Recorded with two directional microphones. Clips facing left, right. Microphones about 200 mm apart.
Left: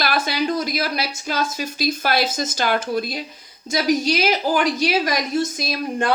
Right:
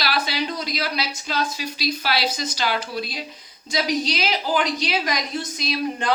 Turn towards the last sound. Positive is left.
turn(degrees=50)  # may be behind; listen again after turning